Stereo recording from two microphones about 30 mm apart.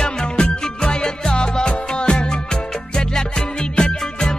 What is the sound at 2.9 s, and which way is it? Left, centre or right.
Music, left.